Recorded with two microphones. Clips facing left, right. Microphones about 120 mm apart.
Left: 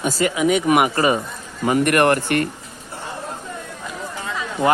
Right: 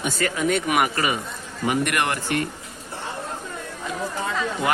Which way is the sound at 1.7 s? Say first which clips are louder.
Left 7 dB; 50° left (ahead or behind).